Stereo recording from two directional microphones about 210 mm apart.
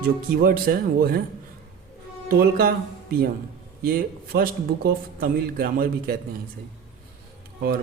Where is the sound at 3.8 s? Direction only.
45° right (ahead or behind).